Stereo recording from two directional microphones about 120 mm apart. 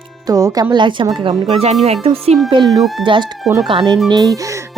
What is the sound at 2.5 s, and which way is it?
Speech, 40° right (ahead or behind).